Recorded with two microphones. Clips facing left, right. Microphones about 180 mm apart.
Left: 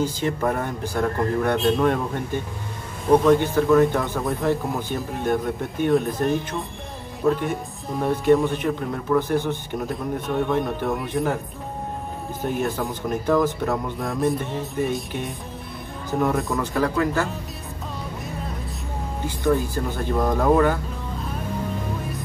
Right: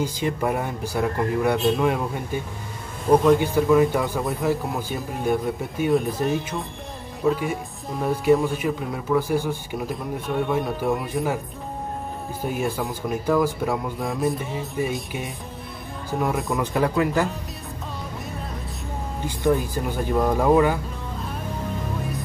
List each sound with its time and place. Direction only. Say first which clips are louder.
0.0 s speech: left 1 dB; 10° right (ahead or behind)
12.4 s speech: left 1 dB; 10° right (ahead or behind)
16.5 s speech: right 1 dB; 15° right (ahead or behind)
19.2 s speech: even; 15° right (ahead or behind)